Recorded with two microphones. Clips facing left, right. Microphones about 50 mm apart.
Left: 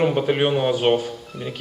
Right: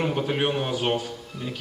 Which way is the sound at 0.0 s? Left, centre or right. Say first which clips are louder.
Left 5 dB; left.